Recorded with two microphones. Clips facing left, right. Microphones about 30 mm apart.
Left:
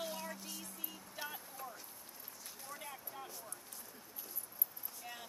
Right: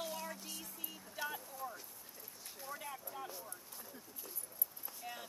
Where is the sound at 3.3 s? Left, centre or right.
Centre.